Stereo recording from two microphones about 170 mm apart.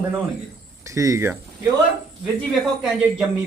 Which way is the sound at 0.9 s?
20° right (ahead or behind).